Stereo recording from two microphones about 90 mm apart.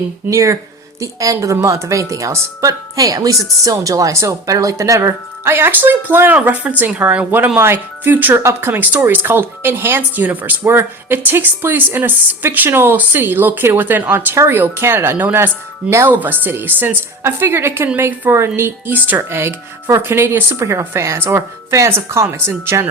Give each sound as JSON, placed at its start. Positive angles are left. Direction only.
{"t": 0.3, "sound": "a woman's voice", "side_deg": -35}